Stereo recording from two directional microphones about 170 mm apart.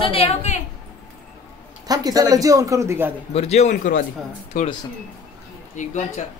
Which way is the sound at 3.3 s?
40° left (ahead or behind).